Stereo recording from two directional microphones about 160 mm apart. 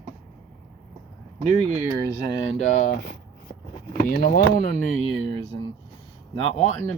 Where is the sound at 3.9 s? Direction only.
70° left (ahead or behind); by 4.9 s 55° left (ahead or behind).